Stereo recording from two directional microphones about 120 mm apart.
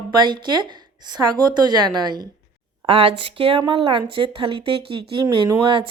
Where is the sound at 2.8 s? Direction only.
55° right (ahead or behind).